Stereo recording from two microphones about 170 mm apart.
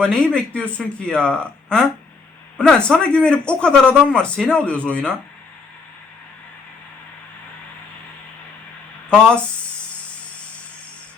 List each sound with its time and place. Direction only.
0.0 s a man's voice: 5° left (ahead or behind)
9.0 s speech: 5° left (ahead or behind)